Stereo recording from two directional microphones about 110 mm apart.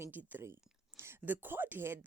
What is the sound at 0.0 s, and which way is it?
Speech, 15° right (ahead or behind).